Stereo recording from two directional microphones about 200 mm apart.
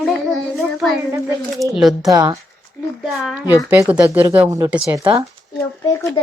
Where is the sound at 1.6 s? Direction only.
Centre (ahead or behind).